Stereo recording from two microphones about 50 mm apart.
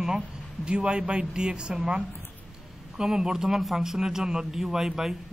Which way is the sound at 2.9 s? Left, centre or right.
Centre.